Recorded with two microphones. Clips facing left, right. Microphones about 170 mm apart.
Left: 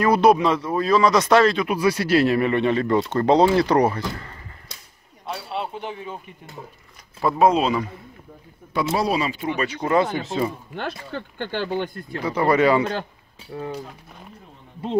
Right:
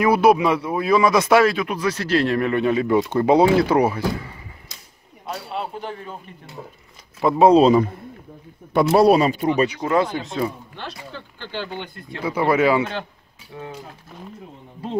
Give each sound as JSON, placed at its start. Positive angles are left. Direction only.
{"t": 0.0, "sound": "speech", "side_deg": -5}
{"t": 1.7, "sound": "speech", "side_deg": 10}
{"t": 5.2, "sound": "a man's voice", "side_deg": 0}
{"t": 7.2, "sound": "speech", "side_deg": -25}
{"t": 8.7, "sound": "a man's voice", "side_deg": -60}
{"t": 9.8, "sound": "speech", "side_deg": 0}
{"t": 10.8, "sound": "speech", "side_deg": 55}
{"t": 12.2, "sound": "speech", "side_deg": -10}
{"t": 13.5, "sound": "speech", "side_deg": 35}